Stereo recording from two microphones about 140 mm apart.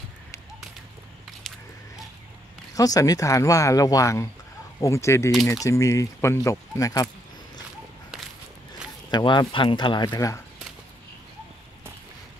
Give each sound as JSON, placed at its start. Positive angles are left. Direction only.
{"t": 1.5, "sound": "a sound", "side_deg": 5}
{"t": 2.7, "sound": "speech", "side_deg": 25}
{"t": 9.1, "sound": "speech", "side_deg": 30}